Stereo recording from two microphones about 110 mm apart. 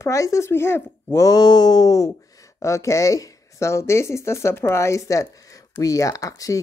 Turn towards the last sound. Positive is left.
turn(degrees=30)  # may be behind; listen again after turning